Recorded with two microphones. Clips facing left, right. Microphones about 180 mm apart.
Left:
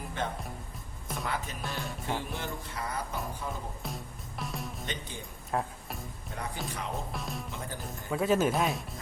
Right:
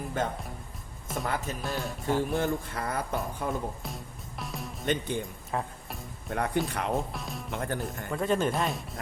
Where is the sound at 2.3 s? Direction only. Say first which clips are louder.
Right 9 dB; 50° right (ahead or behind).